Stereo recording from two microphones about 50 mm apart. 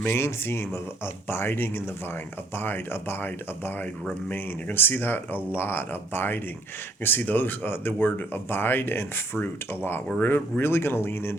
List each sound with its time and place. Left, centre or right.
0.0 s speech: left